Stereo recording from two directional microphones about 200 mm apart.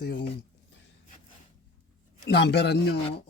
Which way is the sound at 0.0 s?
55° left (ahead or behind).